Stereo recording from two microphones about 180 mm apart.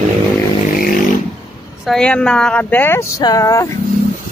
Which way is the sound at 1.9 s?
5° left (ahead or behind).